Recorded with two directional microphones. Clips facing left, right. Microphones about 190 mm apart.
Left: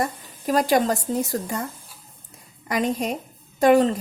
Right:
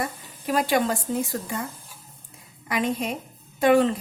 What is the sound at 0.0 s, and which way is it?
Speech, 40° left (ahead or behind).